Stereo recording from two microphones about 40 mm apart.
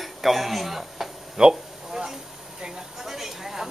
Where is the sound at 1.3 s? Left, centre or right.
Centre.